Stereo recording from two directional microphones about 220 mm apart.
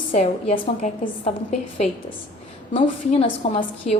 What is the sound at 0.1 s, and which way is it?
A woman's voice, 30° left (ahead or behind).